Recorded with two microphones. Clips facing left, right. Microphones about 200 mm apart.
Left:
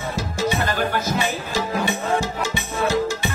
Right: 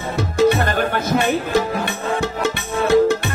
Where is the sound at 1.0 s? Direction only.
60° right (ahead or behind).